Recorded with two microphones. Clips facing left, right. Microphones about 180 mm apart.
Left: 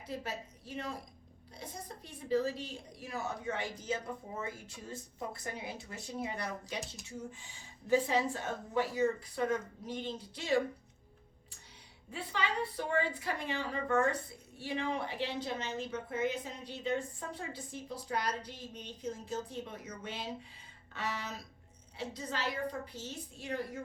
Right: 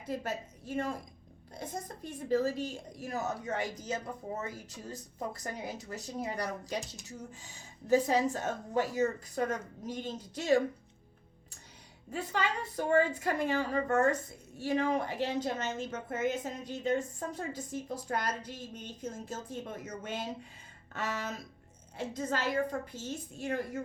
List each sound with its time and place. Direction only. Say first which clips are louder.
0.0 s a woman's voice: right 4 dB; 50° right (ahead or behind)
12.1 s a woman's voice: right 3 dB; 45° right (ahead or behind)